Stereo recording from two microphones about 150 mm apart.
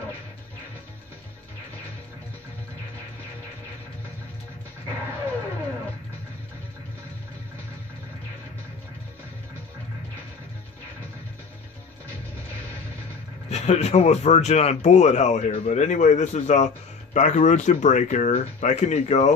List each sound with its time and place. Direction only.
13.5 s speech: 45° left (ahead or behind)